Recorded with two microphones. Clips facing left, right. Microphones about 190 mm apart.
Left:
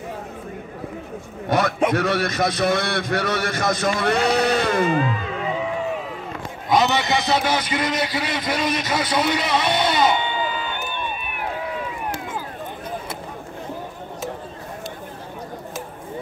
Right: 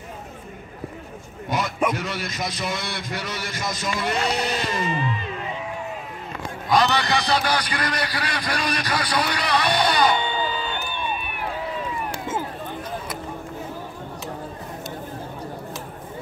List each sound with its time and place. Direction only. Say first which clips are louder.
1.5 s a man's voice: left 5 dB; 65° left (ahead or behind); by 5.9 s 90° left
6.7 s a man's voice: left 1 dB; 20° left (ahead or behind)